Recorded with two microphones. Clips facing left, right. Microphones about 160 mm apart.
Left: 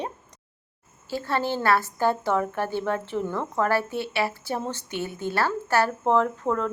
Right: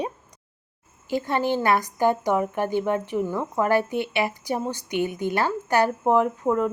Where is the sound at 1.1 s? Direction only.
15° right (ahead or behind).